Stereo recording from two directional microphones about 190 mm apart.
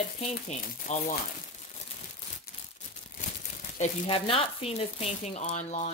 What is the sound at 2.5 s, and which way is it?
Crumpling, 55° left (ahead or behind).